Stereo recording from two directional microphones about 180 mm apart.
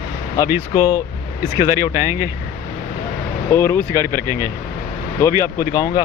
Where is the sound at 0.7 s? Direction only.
20° left (ahead or behind).